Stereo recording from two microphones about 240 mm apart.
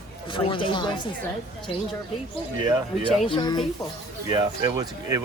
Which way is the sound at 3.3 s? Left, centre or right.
Centre.